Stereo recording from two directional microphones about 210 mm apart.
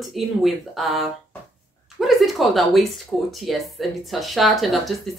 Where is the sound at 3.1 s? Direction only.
Centre (ahead or behind).